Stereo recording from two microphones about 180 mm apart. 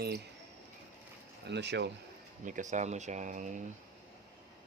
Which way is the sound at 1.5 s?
70° right (ahead or behind).